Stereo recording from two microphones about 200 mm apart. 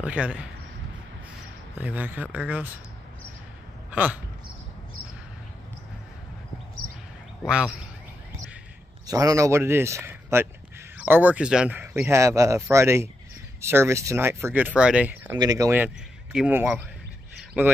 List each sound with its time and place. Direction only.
0.0 s speech: 5° right (ahead or behind)
1.8 s speech: 10° right (ahead or behind)
3.9 s speech: 5° right (ahead or behind)
7.4 s speech: 5° right (ahead or behind)
9.0 s speech: 15° right (ahead or behind)
15.3 s speech: 20° right (ahead or behind)